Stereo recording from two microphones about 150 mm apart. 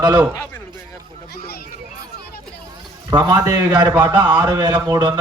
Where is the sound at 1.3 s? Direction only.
90° left.